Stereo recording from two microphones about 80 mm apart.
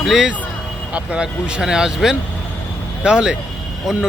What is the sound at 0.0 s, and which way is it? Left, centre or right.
Speech, centre.